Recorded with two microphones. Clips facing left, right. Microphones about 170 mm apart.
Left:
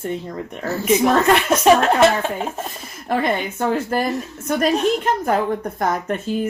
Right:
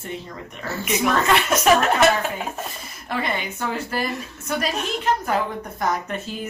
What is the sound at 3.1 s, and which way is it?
Speech, 45° left (ahead or behind).